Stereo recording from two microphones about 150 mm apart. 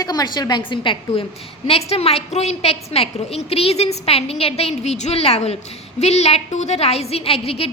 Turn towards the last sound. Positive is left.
turn(degrees=40)  # may be behind; listen again after turning